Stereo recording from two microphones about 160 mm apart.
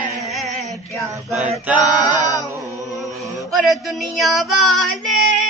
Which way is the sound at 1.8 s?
25° left (ahead or behind).